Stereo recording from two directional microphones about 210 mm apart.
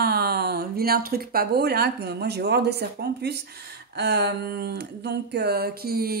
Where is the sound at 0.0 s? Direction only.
50° right (ahead or behind).